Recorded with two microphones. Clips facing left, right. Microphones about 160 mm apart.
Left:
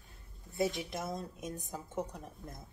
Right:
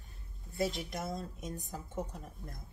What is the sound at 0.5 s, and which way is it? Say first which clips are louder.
A woman's voice: left 1 dB; 20° left (ahead or behind).